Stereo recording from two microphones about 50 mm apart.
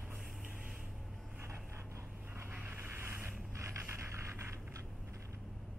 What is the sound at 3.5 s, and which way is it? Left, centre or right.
Music, right.